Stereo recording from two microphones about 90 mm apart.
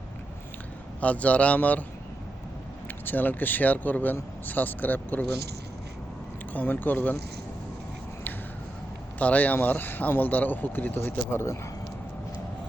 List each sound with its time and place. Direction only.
1.0 s a man's voice: 15° left (ahead or behind)
3.1 s speech: 20° left (ahead or behind)
6.5 s speech: 20° left (ahead or behind)
9.1 s speech: 20° left (ahead or behind)